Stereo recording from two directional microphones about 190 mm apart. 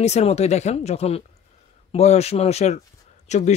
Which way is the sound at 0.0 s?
35° left (ahead or behind).